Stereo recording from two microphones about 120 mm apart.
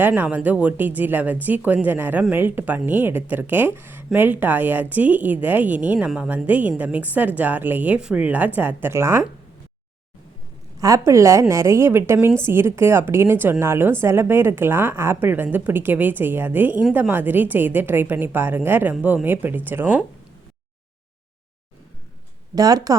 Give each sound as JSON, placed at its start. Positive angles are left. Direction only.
{"t": 0.0, "sound": "speech", "side_deg": -15}
{"t": 10.8, "sound": "a woman's voice", "side_deg": -30}
{"t": 22.5, "sound": "speech", "side_deg": -30}